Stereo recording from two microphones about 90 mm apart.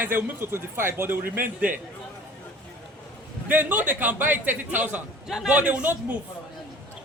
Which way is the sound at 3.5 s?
20° right (ahead or behind).